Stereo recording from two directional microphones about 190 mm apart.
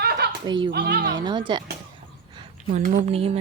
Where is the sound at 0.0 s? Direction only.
55° right (ahead or behind).